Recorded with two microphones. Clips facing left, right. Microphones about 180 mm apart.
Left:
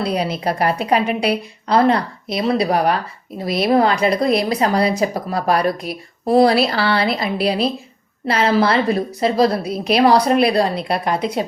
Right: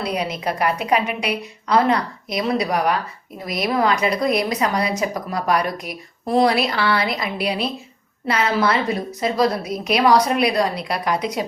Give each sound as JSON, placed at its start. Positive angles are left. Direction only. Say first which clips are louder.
{"t": 0.0, "sound": "a woman's voice", "louder": "left 3 dB", "side_deg": 30}